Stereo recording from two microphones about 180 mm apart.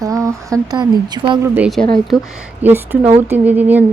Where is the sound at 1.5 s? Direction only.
5° right (ahead or behind).